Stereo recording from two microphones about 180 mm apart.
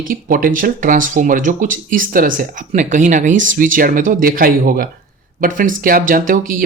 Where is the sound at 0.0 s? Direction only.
50° right (ahead or behind).